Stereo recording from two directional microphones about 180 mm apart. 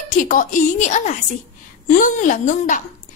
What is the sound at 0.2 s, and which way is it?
A woman's voice, 45° left (ahead or behind).